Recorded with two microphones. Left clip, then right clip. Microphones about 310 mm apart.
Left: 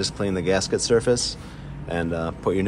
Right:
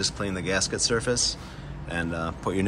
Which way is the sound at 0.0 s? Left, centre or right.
Centre.